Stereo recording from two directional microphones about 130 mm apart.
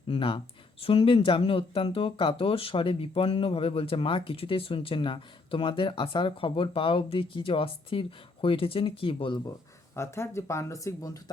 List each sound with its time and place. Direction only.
0.1 s speech: 45° left (ahead or behind)
9.9 s speech: 20° left (ahead or behind)